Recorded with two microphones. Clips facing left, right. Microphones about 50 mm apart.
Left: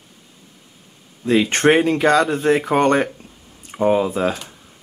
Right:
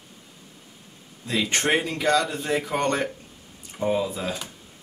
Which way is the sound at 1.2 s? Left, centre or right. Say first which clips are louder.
Left 9 dB; left.